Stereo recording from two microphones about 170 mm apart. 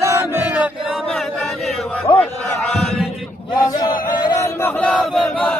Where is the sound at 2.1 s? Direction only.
25° left (ahead or behind).